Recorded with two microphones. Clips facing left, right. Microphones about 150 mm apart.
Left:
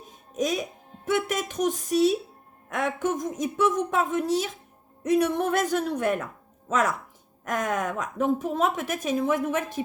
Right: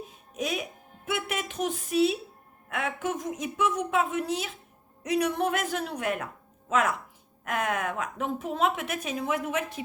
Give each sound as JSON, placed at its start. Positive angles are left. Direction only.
{"t": 0.3, "sound": "a woman's voice", "side_deg": 35}